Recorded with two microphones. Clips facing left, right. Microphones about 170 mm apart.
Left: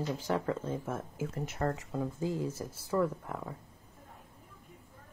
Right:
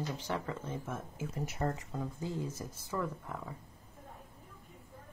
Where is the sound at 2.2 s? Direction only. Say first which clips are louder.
Left 4 dB; 20° left (ahead or behind).